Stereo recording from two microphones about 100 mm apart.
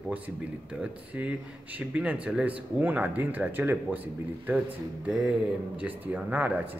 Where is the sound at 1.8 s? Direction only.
15° right (ahead or behind).